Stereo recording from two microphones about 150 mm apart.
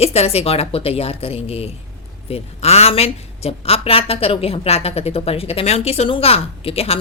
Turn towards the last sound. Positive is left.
turn(degrees=40)  # may be behind; listen again after turning